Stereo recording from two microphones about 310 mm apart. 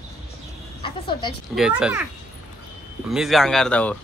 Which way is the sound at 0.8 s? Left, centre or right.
Centre.